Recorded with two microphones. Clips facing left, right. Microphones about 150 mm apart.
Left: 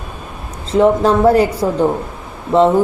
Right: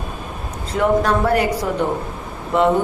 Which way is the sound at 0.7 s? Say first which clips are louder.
Left 5 dB; 30° left (ahead or behind).